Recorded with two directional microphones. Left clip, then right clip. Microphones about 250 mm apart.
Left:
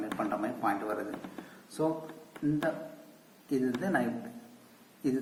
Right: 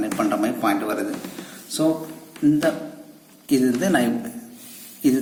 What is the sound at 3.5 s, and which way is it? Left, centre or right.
Speech, right.